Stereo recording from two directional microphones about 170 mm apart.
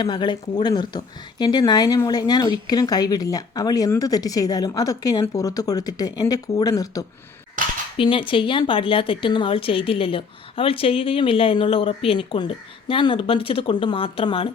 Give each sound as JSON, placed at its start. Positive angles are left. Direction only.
{"t": 0.0, "sound": "a woman's voice", "side_deg": 25}